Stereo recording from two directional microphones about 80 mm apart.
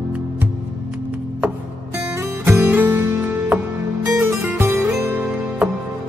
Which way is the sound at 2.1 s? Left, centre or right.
Right.